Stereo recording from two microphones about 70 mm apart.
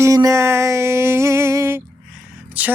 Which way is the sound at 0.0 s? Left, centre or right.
Right.